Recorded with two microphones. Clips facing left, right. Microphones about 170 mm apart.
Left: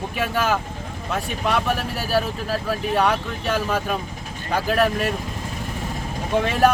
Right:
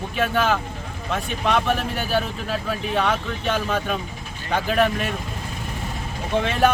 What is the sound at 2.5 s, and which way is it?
Speech, 40° left (ahead or behind).